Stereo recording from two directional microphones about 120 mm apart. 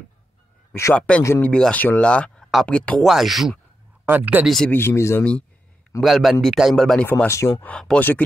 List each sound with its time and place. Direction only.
0.9 s speech: 10° left (ahead or behind)
1.2 s speech: 20° left (ahead or behind)
1.5 s speech: 10° left (ahead or behind)
4.0 s speech: 15° right (ahead or behind)
4.6 s speech: 20° left (ahead or behind)
5.9 s speech: centre (ahead or behind)
7.1 s speech: 20° left (ahead or behind)
7.6 s speech: 10° left (ahead or behind)